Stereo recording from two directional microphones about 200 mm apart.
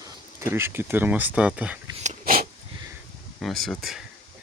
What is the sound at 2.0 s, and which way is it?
Dog, 45° right (ahead or behind).